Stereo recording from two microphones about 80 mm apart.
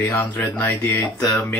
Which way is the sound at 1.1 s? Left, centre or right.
Left.